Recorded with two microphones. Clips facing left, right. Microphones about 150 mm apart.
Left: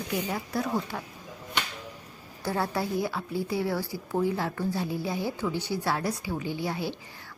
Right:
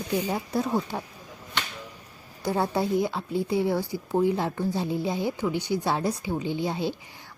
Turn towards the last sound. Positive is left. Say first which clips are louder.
# right 3 dB
turn(degrees=-20)  # may be behind; listen again after turning